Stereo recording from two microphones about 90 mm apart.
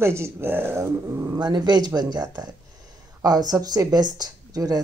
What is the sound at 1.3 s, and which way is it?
Speech, 55° right (ahead or behind).